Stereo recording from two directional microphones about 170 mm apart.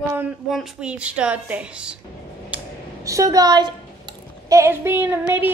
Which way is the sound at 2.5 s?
10° right (ahead or behind).